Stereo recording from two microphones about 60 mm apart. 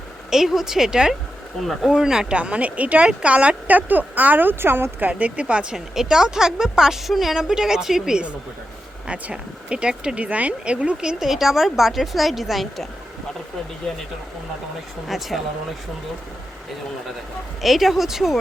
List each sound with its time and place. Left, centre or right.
0.3 s speech: centre
2.3 s speech: centre; by 5.0 s right
5.0 s speech: right
5.7 s speech: centre
15.0 s speech: centre
17.6 s speech: centre